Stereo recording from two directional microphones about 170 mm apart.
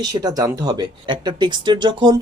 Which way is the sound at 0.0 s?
25° right (ahead or behind).